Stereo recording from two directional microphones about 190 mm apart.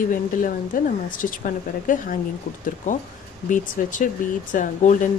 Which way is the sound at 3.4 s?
45° left (ahead or behind).